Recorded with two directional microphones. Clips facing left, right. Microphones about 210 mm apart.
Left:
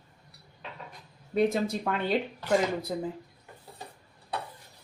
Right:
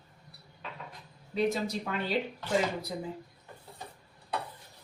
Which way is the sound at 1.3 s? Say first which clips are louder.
Left 4 dB; 55° left (ahead or behind).